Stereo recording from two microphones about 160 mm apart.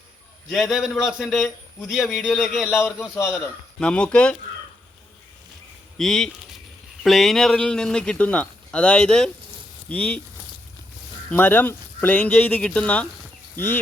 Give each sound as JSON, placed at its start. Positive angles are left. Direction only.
{"t": 0.5, "sound": "speech", "side_deg": 0}
{"t": 2.6, "sound": "speech", "side_deg": 15}
{"t": 3.8, "sound": "speech", "side_deg": 5}
{"t": 6.0, "sound": "speech", "side_deg": 5}
{"t": 11.3, "sound": "speech", "side_deg": 10}